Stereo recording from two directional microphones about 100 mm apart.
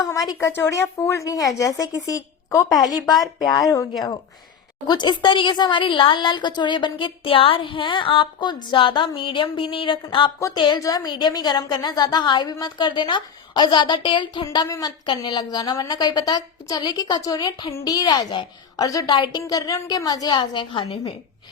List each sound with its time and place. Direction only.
0.0 s a woman's voice: 35° left (ahead or behind)
2.7 s a woman's voice: centre (ahead or behind)
3.3 s a woman's voice: 40° left (ahead or behind)
4.9 s a woman's voice: 50° left (ahead or behind)
10.8 s a woman's voice: 35° left (ahead or behind)
18.9 s a woman's voice: 35° left (ahead or behind)
19.1 s a woman's voice: 45° left (ahead or behind)